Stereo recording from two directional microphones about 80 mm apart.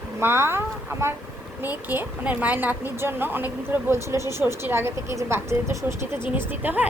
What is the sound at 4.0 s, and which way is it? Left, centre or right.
Speech, right.